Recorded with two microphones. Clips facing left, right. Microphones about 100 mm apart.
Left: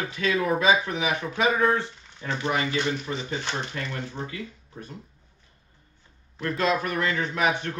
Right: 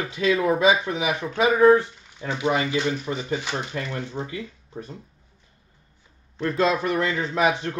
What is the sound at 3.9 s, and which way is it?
Speech, 25° right (ahead or behind).